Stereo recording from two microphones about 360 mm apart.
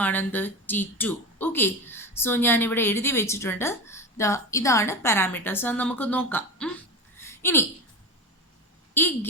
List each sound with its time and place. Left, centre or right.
0.0 s speech: centre
7.2 s a sound: centre
9.0 s speech: centre